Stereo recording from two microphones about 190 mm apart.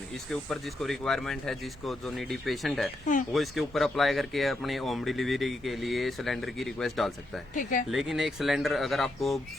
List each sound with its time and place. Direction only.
0.3 s speech: centre (ahead or behind)
7.5 s speech: 45° left (ahead or behind)
7.9 s speech: centre (ahead or behind)